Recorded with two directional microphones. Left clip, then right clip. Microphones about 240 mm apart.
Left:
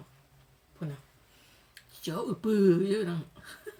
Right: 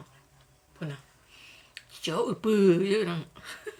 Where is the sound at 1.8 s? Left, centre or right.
Left.